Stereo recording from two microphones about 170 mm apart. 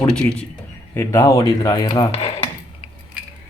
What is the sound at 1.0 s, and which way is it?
Speech, 15° left (ahead or behind).